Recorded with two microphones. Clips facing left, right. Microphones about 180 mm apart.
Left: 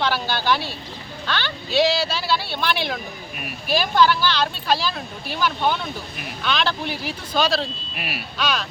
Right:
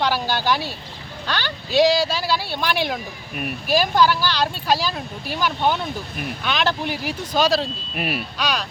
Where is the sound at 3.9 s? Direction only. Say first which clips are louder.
Even; 10° right (ahead or behind).